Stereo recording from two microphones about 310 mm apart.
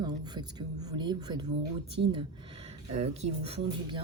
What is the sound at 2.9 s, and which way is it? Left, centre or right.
Speech, right.